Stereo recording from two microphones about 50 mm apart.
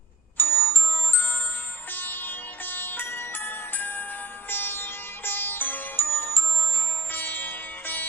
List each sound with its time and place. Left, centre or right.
0.3 s music: left